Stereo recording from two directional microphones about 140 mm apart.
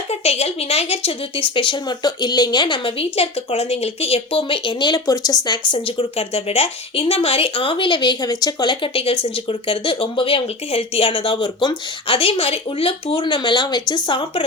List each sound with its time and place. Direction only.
0.1 s speech: 50° left (ahead or behind)